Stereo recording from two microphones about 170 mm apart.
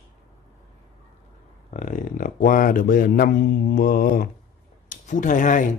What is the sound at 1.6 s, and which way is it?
Speech, 45° left (ahead or behind).